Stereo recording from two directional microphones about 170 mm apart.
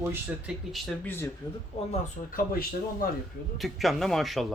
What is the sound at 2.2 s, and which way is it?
Speech, 45° left (ahead or behind).